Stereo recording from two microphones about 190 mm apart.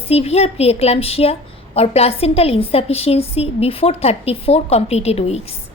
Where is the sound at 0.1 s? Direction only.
35° left (ahead or behind).